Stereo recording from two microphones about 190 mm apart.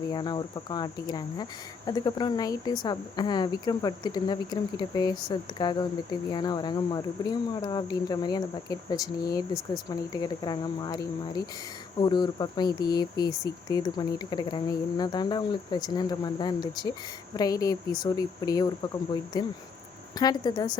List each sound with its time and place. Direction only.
0.1 s speech: 25° left (ahead or behind)
20.1 s speech: 20° left (ahead or behind)